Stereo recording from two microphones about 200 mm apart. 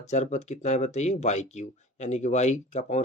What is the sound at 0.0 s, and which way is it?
Speech, 35° left (ahead or behind).